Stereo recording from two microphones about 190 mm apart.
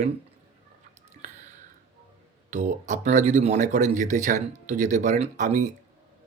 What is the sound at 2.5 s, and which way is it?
Speech, 40° right (ahead or behind).